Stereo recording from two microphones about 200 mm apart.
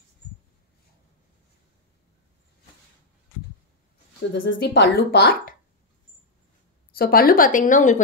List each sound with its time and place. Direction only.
4.3 s speech: 60° left (ahead or behind)
6.9 s a woman's voice: 50° left (ahead or behind)